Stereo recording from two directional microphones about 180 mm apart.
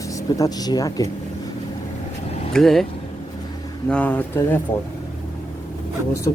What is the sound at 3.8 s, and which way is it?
Speech, 10° left (ahead or behind).